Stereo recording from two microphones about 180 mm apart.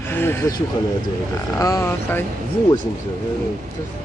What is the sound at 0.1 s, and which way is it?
Speech, 10° left (ahead or behind).